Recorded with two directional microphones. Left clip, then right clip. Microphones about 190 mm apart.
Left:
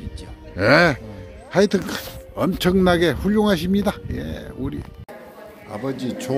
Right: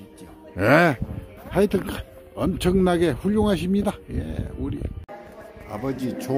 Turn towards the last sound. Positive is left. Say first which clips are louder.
# left 2 dB
turn(degrees=-10)  # may be behind; listen again after turning